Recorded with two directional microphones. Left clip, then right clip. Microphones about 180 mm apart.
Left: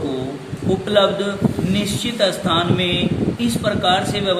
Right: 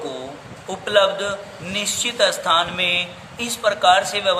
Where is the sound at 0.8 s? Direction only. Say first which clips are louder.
Even; 40° right (ahead or behind).